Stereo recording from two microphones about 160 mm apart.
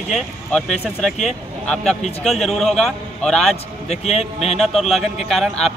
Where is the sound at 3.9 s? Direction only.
40° left (ahead or behind).